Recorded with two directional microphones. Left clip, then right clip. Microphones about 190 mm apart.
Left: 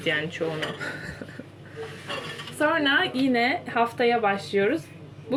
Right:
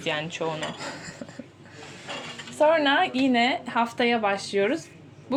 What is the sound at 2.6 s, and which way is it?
A woman's voice, 40° right (ahead or behind).